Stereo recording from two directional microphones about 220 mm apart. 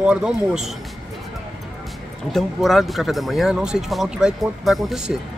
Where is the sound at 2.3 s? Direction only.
Centre (ahead or behind).